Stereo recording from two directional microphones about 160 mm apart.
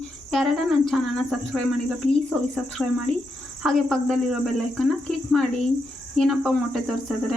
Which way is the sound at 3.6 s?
Centre (ahead or behind).